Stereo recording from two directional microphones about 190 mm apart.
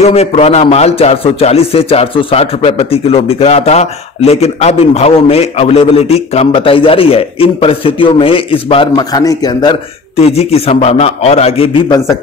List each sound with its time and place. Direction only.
0.0 s a man's voice: 35° left (ahead or behind)